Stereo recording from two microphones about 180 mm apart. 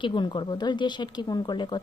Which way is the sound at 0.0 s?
25° left (ahead or behind).